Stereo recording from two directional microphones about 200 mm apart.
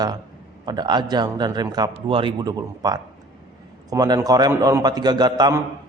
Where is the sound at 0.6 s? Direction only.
20° right (ahead or behind).